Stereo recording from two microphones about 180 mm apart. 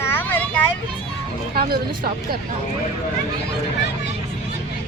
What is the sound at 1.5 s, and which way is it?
Speech, 60° right (ahead or behind).